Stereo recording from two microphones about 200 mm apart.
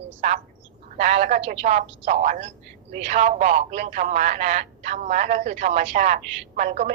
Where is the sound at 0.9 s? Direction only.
35° right (ahead or behind).